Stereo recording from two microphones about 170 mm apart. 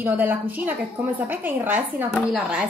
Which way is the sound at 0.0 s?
10° right (ahead or behind).